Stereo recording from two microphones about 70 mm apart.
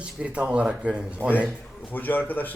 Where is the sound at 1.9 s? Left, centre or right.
Left.